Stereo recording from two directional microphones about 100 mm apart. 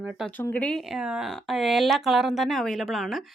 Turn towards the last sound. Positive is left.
turn(degrees=0)  # may be behind; listen again after turning